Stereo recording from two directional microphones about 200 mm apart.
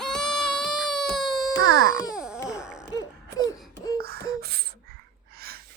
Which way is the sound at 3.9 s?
50° right (ahead or behind).